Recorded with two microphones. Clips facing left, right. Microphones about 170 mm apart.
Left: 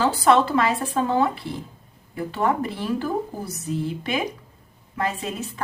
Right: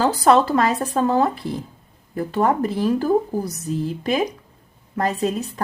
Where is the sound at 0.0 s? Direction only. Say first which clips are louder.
Right 2 dB; 40° right (ahead or behind).